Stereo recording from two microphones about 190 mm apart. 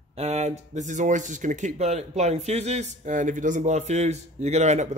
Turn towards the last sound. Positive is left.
turn(degrees=-35)  # may be behind; listen again after turning